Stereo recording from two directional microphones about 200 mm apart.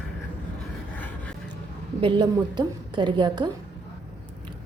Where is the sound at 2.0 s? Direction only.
25° right (ahead or behind).